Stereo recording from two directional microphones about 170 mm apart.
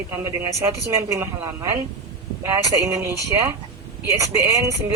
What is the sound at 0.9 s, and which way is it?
Speech, 15° right (ahead or behind).